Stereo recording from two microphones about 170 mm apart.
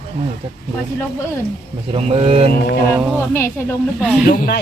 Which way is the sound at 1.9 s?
35° right (ahead or behind).